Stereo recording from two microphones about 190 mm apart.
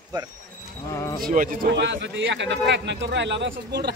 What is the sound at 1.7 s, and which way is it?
Speech, 65° right (ahead or behind).